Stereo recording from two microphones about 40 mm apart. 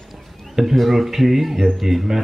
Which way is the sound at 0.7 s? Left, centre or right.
Centre.